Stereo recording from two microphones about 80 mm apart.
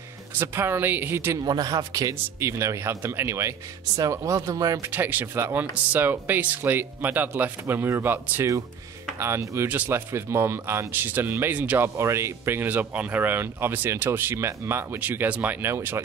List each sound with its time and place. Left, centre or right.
0.4 s speech: right
1.4 s speech: right
4.8 s speech: right
9.7 s speech: right
12.0 s speech: right
12.6 s speech: centre